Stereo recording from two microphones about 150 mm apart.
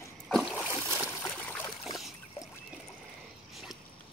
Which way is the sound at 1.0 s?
15° left (ahead or behind).